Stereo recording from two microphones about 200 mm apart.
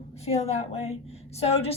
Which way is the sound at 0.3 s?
30° left (ahead or behind).